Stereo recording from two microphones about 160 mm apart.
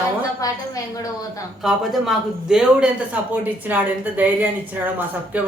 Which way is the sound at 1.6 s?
5° right (ahead or behind).